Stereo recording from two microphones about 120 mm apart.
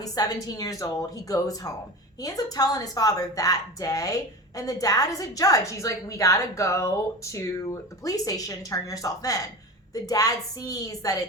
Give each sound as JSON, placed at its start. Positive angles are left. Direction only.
{"t": 0.0, "sound": "a woman's voice", "side_deg": 30}